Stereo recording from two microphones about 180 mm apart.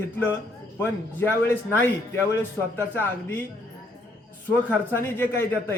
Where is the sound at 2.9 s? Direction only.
10° left (ahead or behind).